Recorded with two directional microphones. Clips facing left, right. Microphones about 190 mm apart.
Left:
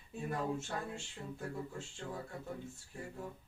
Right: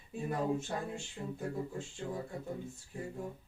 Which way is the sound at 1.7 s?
20° right (ahead or behind).